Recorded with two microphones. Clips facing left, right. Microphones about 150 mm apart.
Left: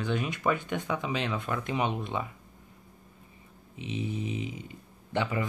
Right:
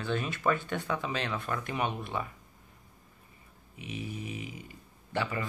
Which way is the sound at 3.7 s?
25° left (ahead or behind).